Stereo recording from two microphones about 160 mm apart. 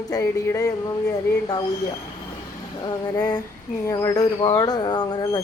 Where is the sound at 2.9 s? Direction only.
25° left (ahead or behind).